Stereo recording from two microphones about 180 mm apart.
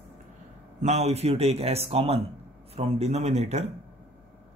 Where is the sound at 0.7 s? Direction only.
40° right (ahead or behind).